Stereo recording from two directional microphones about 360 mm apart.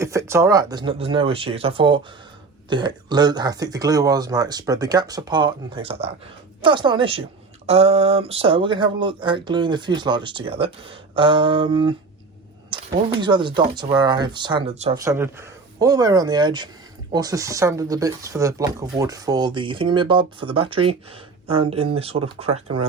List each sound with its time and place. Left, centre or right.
0.0 s speech: centre